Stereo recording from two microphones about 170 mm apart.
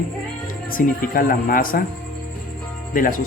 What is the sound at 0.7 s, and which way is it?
Speech, 55° left (ahead or behind).